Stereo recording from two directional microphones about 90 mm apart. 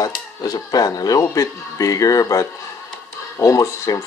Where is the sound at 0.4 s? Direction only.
45° left (ahead or behind).